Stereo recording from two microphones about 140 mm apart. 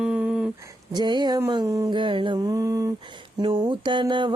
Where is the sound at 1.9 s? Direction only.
35° right (ahead or behind).